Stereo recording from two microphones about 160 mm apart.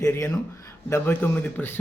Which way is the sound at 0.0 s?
15° left (ahead or behind).